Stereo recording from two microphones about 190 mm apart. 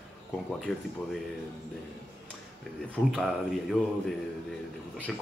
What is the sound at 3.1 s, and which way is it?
Speech, centre (ahead or behind).